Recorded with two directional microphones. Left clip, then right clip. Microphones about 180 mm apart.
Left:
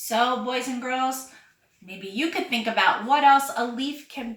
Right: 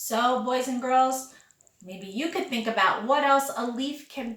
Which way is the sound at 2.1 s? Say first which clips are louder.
Left 3 dB; 15° right (ahead or behind).